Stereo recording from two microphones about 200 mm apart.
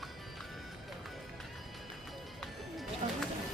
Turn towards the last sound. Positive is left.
turn(degrees=-35)  # may be behind; listen again after turning